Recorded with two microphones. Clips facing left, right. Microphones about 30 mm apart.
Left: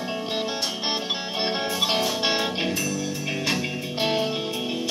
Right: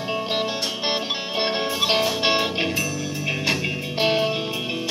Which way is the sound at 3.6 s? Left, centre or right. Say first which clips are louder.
Right 3 dB; right.